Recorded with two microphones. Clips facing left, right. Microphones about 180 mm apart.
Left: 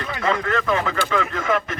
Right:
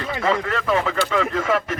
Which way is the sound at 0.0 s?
25° right (ahead or behind).